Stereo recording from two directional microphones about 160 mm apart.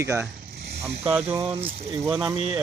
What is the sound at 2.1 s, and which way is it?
Speech, 5° right (ahead or behind).